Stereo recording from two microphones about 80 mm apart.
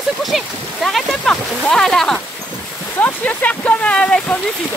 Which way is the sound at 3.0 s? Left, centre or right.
Centre.